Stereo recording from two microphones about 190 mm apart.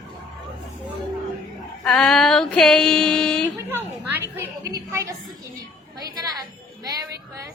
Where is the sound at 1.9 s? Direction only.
5° left (ahead or behind).